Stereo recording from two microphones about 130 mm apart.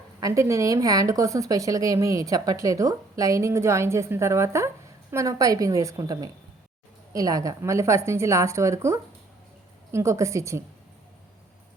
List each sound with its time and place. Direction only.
0.2 s a woman's voice: 25° right (ahead or behind)